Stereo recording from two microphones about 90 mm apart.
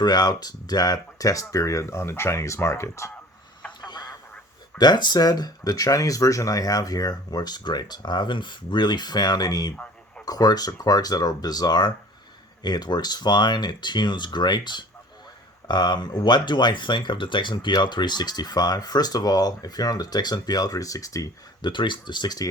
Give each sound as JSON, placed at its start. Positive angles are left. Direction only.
{"t": 0.0, "sound": "speech", "side_deg": 50}
{"t": 3.8, "sound": "a sound", "side_deg": 50}
{"t": 4.8, "sound": "speech", "side_deg": 55}
{"t": 9.7, "sound": "a sound", "side_deg": 15}
{"t": 10.2, "sound": "speech", "side_deg": 45}
{"t": 21.6, "sound": "speech", "side_deg": 60}